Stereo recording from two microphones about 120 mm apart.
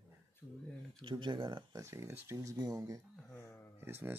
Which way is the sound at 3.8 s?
20° right (ahead or behind).